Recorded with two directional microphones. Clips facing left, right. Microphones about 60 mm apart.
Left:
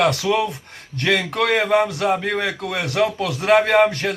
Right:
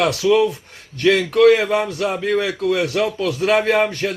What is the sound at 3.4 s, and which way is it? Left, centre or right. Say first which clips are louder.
Speech: left 2 dB; left.